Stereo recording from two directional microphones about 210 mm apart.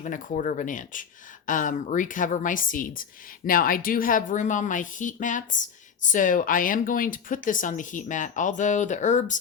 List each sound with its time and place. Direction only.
0.0 s a woman's voice: 40° left (ahead or behind)